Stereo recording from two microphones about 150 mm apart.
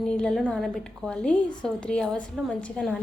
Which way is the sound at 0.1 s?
5° left (ahead or behind).